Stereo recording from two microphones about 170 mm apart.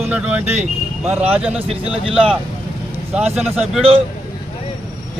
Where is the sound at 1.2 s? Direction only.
35° right (ahead or behind).